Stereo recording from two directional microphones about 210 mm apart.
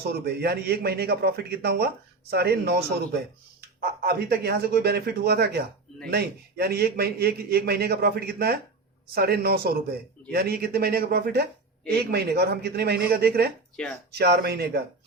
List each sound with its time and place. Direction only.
0.1 s a man's voice: 50° right (ahead or behind)